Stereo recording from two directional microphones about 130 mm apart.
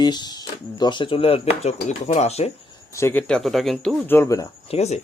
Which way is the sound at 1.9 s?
65° left (ahead or behind).